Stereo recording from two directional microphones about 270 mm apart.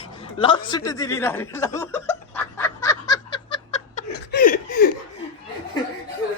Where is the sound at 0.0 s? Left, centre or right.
Centre.